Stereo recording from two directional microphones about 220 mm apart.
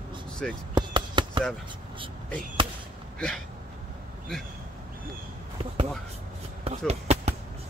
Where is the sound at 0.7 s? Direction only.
20° right (ahead or behind).